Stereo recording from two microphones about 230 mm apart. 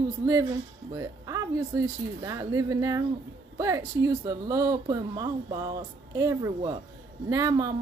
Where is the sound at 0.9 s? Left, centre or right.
Centre.